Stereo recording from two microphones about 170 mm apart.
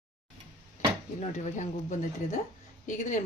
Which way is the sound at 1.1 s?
45° left (ahead or behind).